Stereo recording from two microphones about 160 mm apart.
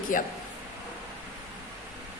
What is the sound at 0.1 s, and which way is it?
Speech, 60° left (ahead or behind).